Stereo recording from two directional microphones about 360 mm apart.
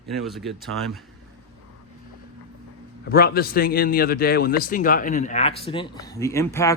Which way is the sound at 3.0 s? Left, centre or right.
Left.